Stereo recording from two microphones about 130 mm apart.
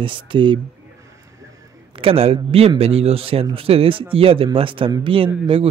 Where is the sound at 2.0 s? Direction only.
45° right (ahead or behind).